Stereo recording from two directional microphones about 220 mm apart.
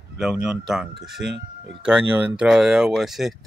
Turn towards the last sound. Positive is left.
turn(degrees=0)  # may be behind; listen again after turning